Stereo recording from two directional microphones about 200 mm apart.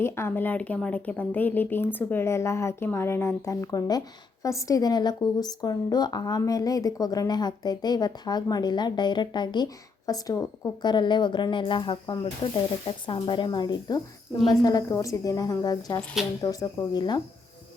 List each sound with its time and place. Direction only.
0.0 s speech: 10° left (ahead or behind)